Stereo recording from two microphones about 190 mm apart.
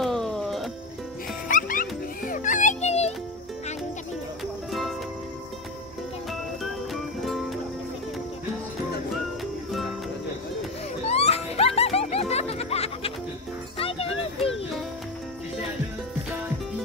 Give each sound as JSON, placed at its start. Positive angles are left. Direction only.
{"t": 0.0, "sound": "music", "side_deg": 0}
{"t": 1.5, "sound": "music", "side_deg": 45}
{"t": 11.1, "sound": "music", "side_deg": 30}